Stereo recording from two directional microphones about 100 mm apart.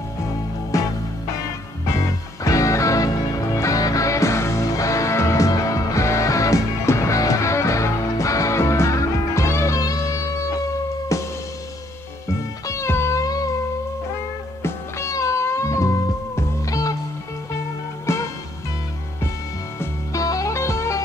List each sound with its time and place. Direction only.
0.7 s music: 35° left (ahead or behind)
2.4 s music: 35° left (ahead or behind)
12.6 s music: 30° left (ahead or behind)
14.6 s music: 30° left (ahead or behind)
18.0 s music: 30° left (ahead or behind)
19.8 s music: 35° left (ahead or behind)